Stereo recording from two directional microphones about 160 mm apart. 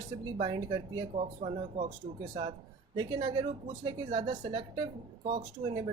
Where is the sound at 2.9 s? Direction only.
30° right (ahead or behind).